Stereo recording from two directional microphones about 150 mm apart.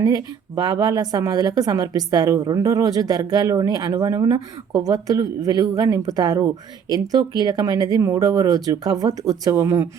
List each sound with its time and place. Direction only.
0.0 s speech: 25° right (ahead or behind)